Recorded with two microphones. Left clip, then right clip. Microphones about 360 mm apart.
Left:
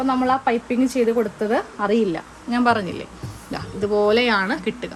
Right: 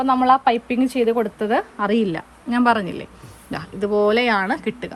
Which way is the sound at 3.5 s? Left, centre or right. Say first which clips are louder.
Even; right.